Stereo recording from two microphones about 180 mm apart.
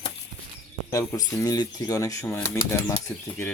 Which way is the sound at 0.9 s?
20° left (ahead or behind).